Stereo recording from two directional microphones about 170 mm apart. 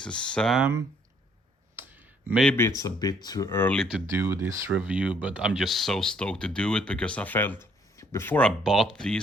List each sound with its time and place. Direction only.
0.0 s speech: 5° left (ahead or behind)
1.7 s clicking: 10° right (ahead or behind)
2.4 s speech: 10° left (ahead or behind)
4.1 s speech: 15° right (ahead or behind); by 9.2 s 5° left (ahead or behind)